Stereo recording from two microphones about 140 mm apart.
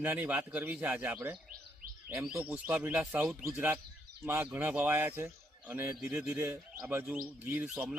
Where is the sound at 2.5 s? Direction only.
15° right (ahead or behind).